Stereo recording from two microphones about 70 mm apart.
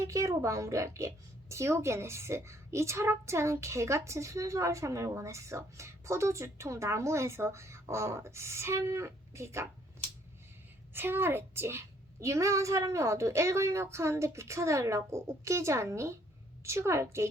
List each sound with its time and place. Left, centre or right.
0.0 s a woman's voice: right
10.9 s a woman's voice: right
12.2 s a woman's voice: right